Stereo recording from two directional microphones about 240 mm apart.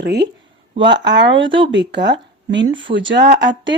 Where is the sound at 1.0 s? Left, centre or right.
Right.